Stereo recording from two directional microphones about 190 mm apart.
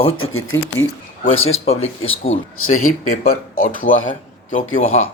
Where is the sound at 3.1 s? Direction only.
50° left (ahead or behind).